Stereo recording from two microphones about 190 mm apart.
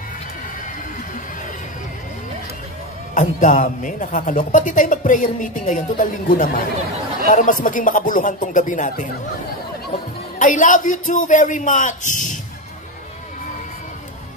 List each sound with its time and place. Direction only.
3.2 s a man's voice: 45° left (ahead or behind)
10.4 s a man's voice: 40° left (ahead or behind)